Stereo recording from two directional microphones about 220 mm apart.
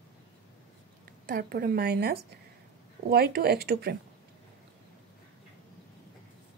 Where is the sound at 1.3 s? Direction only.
45° right (ahead or behind).